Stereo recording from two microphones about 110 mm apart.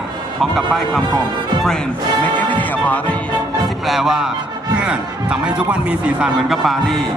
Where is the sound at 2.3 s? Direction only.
15° left (ahead or behind).